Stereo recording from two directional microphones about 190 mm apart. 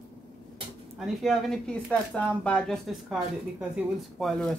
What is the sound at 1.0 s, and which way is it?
Speech, centre (ahead or behind).